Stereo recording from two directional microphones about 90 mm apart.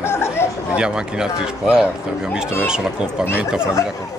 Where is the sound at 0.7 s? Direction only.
10° right (ahead or behind).